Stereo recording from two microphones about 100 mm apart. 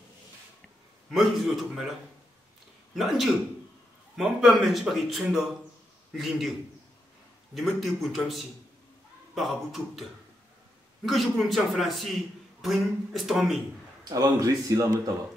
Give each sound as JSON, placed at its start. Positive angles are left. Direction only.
{"t": 1.1, "sound": "a man's voice", "side_deg": 0}
{"t": 3.0, "sound": "a man's voice", "side_deg": 0}
{"t": 7.5, "sound": "a man's voice", "side_deg": 0}
{"t": 11.1, "sound": "a man's voice", "side_deg": 0}
{"t": 14.0, "sound": "speech", "side_deg": -35}